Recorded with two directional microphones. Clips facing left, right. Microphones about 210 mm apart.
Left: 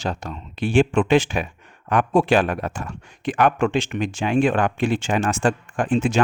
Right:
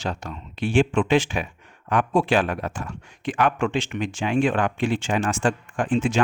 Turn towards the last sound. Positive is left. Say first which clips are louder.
# left 2 dB
turn(degrees=40)  # may be behind; listen again after turning